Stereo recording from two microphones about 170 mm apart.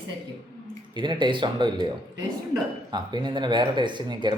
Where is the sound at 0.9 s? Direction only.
25° right (ahead or behind).